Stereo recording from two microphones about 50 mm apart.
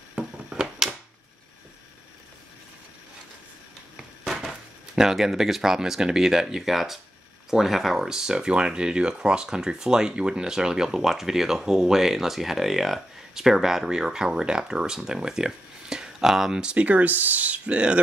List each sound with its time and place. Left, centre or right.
0.1 s a sound: centre
4.3 s speech: centre
16.7 s speech: right